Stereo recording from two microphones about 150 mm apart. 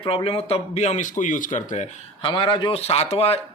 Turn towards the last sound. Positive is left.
turn(degrees=45)  # may be behind; listen again after turning